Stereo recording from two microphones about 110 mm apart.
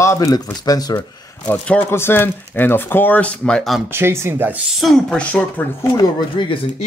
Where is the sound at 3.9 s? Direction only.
25° right (ahead or behind).